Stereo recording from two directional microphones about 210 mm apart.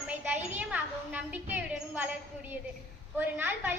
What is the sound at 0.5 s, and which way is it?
A woman's voice, 5° right (ahead or behind).